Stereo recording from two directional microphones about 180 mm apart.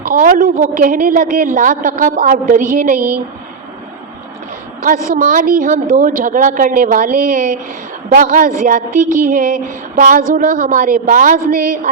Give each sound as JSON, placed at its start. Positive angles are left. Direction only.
{"t": 0.1, "sound": "a woman's voice", "side_deg": -50}
{"t": 4.8, "sound": "a woman's voice", "side_deg": -50}